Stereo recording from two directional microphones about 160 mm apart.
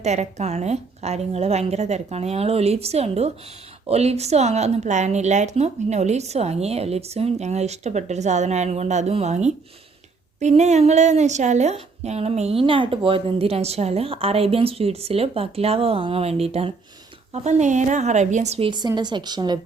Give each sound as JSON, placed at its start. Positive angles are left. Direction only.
{"t": 0.0, "sound": "a woman's voice", "side_deg": -45}
{"t": 18.7, "sound": "speech", "side_deg": -25}